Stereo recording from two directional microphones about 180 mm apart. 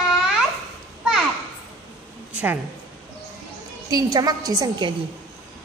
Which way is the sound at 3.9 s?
20° right (ahead or behind).